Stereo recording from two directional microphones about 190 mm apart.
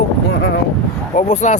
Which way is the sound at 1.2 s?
40° left (ahead or behind).